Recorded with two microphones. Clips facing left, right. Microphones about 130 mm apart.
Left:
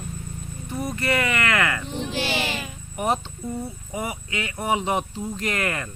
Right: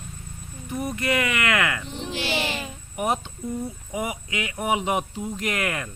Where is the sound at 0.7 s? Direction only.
10° right (ahead or behind).